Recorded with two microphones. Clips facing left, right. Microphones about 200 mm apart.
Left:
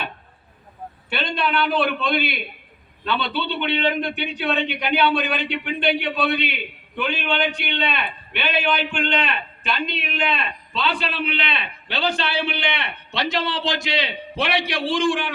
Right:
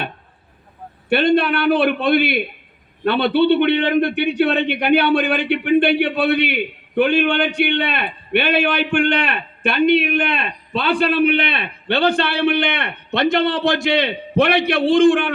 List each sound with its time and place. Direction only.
1.1 s a man's voice: 55° right (ahead or behind)